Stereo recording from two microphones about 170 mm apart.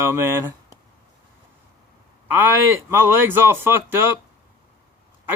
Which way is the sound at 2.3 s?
10° right (ahead or behind).